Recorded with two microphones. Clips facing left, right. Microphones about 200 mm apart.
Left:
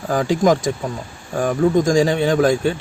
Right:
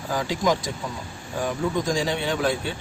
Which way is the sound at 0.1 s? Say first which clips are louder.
Left 7 dB; 50° left (ahead or behind).